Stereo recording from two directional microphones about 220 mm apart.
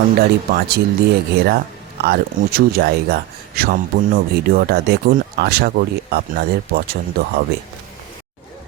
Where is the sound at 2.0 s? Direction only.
45° right (ahead or behind).